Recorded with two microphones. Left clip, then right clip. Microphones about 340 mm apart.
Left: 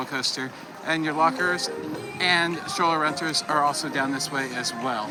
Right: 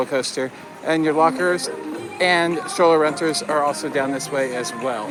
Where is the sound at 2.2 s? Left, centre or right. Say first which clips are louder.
Right 5 dB; centre.